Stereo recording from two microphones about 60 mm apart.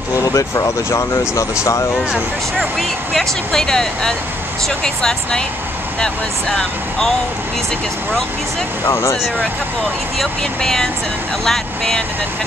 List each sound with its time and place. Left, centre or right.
0.2 s speech: left
2.8 s speech: centre
10.1 s speech: centre